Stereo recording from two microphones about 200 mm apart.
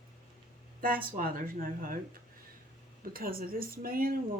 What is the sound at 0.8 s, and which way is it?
Speech, 45° right (ahead or behind).